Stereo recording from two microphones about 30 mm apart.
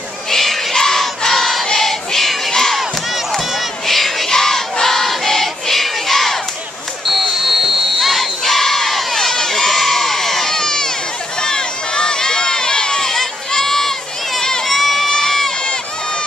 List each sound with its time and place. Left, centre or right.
0.3 s crowd: centre
1.2 s choir: centre
1.8 s battle cry: centre
2.8 s crowd: centre
7.1 s buzzer: centre
8.1 s crowd: centre
11.4 s run: left
13.5 s run: centre
14.6 s crowd: centre
15.0 s crowd: centre